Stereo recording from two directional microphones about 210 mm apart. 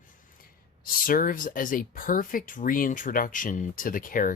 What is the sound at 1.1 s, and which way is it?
Speech, 40° left (ahead or behind).